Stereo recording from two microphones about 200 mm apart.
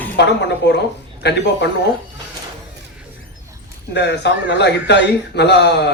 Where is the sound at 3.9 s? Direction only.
60° left (ahead or behind).